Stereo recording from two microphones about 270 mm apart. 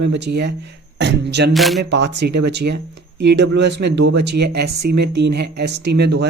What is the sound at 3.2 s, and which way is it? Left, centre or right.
Speech, right.